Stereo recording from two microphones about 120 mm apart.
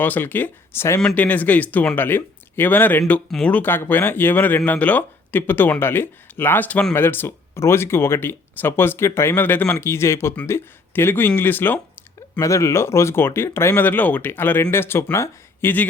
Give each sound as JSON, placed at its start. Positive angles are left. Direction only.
{"t": 0.0, "sound": "speech", "side_deg": 15}